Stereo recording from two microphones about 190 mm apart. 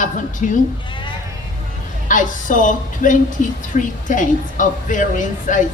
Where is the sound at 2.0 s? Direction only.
45° left (ahead or behind).